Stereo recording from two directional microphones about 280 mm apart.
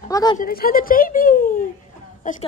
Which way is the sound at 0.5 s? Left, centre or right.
Left.